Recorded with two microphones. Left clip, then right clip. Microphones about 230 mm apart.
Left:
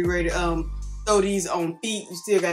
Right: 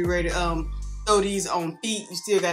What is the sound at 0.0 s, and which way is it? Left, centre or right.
Speech, centre.